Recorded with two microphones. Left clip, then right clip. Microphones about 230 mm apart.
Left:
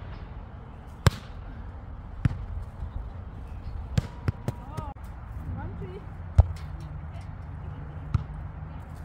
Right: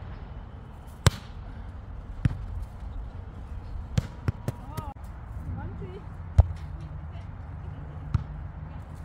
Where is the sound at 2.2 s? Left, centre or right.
Centre.